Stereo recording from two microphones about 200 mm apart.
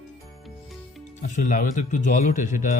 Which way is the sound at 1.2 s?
40° left (ahead or behind).